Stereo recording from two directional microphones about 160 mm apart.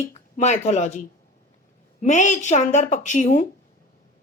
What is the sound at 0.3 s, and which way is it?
A woman's voice, 45° left (ahead or behind).